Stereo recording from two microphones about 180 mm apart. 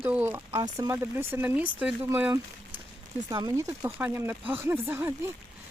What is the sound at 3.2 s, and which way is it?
Speech, 20° right (ahead or behind).